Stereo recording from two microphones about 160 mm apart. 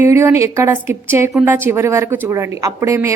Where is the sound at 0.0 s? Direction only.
15° right (ahead or behind).